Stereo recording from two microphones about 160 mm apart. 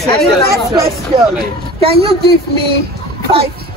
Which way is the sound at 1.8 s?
35° right (ahead or behind).